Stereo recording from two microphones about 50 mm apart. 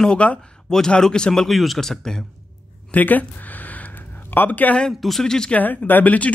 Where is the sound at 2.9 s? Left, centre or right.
Left.